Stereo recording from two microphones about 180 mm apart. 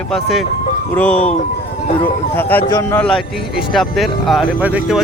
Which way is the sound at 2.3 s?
10° left (ahead or behind).